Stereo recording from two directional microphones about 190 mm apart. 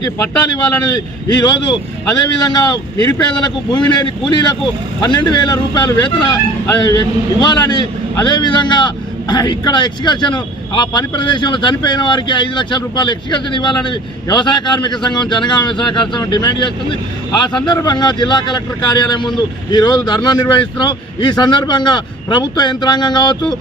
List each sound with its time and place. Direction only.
1.4 s speech: 20° left (ahead or behind)